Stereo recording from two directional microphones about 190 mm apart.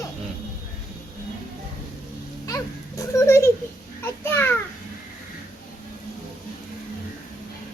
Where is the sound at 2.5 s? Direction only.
15° left (ahead or behind).